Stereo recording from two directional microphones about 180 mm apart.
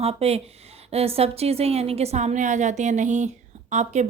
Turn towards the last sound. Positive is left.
turn(degrees=-40)  # may be behind; listen again after turning